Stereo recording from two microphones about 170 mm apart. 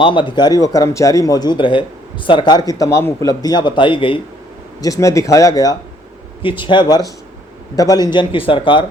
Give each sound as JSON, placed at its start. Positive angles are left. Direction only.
{"t": 0.0, "sound": "a man's voice", "side_deg": 30}
{"t": 4.8, "sound": "a man's voice", "side_deg": 20}